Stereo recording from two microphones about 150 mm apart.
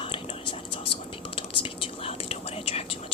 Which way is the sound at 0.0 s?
35° left (ahead or behind).